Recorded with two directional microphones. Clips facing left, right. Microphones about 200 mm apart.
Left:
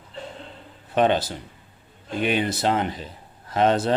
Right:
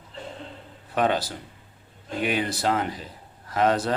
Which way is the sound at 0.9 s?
25° left (ahead or behind).